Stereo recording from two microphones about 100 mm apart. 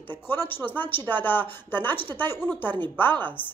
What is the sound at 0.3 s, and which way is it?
Speech, 20° left (ahead or behind).